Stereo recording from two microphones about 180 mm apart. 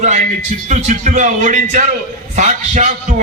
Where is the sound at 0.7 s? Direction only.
45° right (ahead or behind).